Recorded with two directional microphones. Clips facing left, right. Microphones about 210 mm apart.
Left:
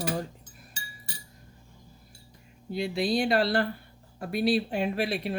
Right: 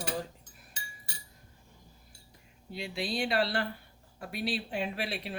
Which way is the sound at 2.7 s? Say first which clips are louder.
Left 8 dB; 40° left (ahead or behind).